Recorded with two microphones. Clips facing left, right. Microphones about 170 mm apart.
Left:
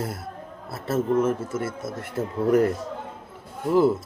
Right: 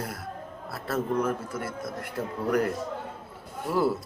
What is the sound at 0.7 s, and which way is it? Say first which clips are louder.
Speech: left 5 dB; 25° left (ahead or behind).